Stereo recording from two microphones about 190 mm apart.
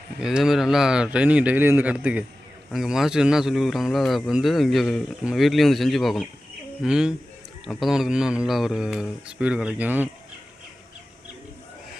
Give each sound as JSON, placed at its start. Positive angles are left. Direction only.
{"t": 0.2, "sound": "speech", "side_deg": -5}